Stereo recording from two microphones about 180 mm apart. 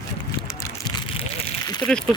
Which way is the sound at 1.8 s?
15° left (ahead or behind).